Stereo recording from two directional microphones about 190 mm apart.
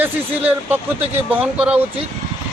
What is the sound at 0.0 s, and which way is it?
Speech, 10° right (ahead or behind).